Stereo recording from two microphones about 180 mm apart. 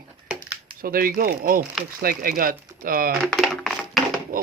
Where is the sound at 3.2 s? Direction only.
Centre (ahead or behind).